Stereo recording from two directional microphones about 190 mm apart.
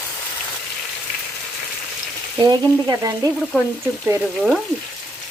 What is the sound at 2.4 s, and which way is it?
Frying, 20° right (ahead or behind).